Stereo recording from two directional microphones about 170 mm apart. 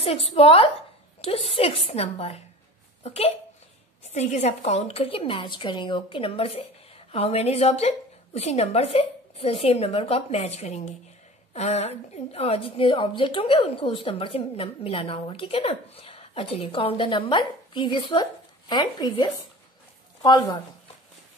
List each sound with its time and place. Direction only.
0.0 s a woman's voice: 35° left (ahead or behind)